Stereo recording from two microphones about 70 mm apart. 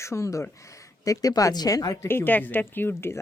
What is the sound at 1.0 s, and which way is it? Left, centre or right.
Speech, left.